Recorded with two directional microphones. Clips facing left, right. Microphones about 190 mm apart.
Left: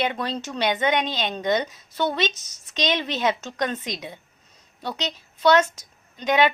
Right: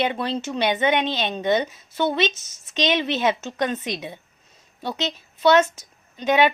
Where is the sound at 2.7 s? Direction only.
15° right (ahead or behind).